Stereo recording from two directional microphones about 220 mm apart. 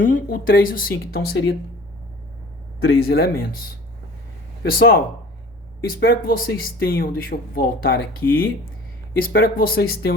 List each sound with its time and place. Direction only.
0.0 s speech: 40° left (ahead or behind)
2.8 s speech: 45° left (ahead or behind)
9.1 s speech: 40° left (ahead or behind)